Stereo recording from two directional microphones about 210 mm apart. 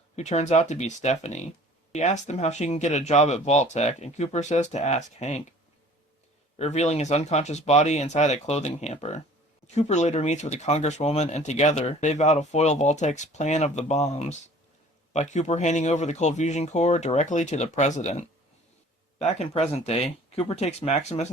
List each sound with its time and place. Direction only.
0.2 s speech: 30° left (ahead or behind)
6.6 s speech: 30° left (ahead or behind)